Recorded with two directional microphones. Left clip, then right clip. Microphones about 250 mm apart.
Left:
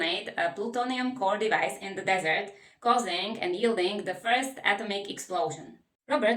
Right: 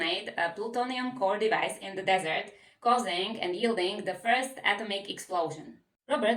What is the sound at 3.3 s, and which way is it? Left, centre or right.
Speech, centre.